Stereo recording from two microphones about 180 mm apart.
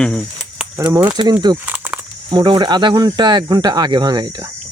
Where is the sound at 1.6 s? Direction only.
10° right (ahead or behind).